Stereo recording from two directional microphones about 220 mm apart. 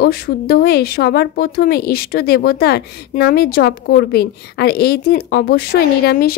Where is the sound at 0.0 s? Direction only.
45° left (ahead or behind).